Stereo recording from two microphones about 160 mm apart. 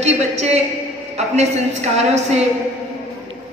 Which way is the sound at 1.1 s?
45° right (ahead or behind).